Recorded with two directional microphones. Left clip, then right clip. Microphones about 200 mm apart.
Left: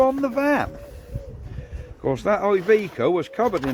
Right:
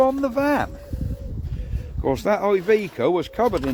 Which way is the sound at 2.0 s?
45° right (ahead or behind).